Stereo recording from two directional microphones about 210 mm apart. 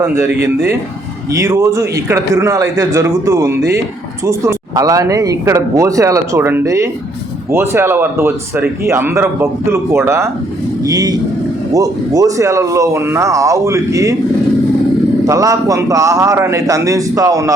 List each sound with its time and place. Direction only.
0.0 s speech: 10° right (ahead or behind)
15.3 s speech: 15° right (ahead or behind)